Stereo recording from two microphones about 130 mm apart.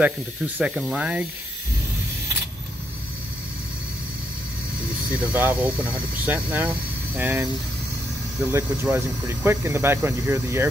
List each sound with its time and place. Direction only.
0.6 s speech: 10° right (ahead or behind)
5.1 s speech: 10° right (ahead or behind)
8.5 s speech: 20° right (ahead or behind)